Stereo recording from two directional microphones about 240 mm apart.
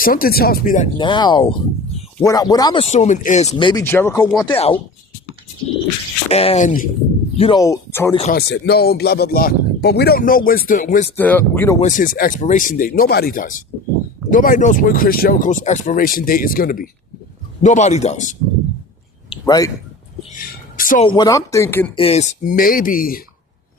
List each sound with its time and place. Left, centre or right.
0.0 s speech: left
0.9 s a man's voice: centre
4.4 s a man's voice: left
6.3 s a man's voice: left
7.3 s speech: centre
8.3 s speech: left
11.2 s speech: centre
11.8 s a man's voice: left
19.3 s a sound: centre
20.3 s a sound: left
21.0 s speech: centre
21.9 s speech: left